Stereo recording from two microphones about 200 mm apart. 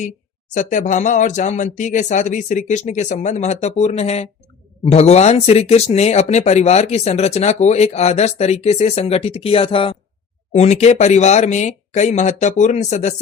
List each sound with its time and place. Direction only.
0.5 s speech: 40° left (ahead or behind)